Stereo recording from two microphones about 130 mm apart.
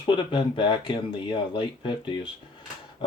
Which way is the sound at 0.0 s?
35° left (ahead or behind).